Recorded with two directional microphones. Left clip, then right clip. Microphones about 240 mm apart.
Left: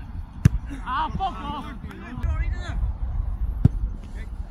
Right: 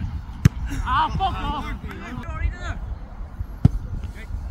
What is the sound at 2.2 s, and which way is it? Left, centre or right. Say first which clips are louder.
Music: right 3 dB; left.